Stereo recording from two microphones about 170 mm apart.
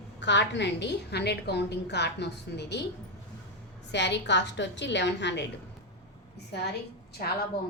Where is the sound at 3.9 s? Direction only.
90° left.